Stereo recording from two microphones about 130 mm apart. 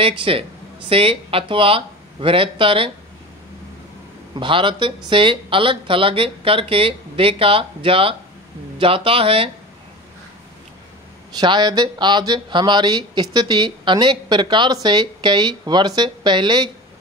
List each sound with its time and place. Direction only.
0.2 s speech: 45° right (ahead or behind)
4.4 s speech: 40° right (ahead or behind)
11.3 s speech: 35° right (ahead or behind)